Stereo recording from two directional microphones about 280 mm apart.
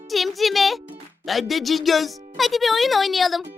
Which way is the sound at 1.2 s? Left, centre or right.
Centre.